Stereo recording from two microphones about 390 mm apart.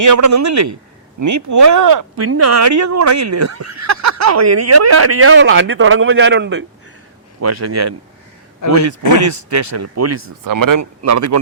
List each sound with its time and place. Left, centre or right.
0.0 s speech: right
2.2 s speech: right
7.4 s speech: right